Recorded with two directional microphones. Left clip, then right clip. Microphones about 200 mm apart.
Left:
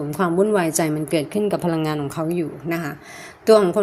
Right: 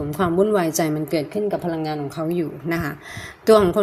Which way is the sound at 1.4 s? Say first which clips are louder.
Left 2 dB; 25° left (ahead or behind).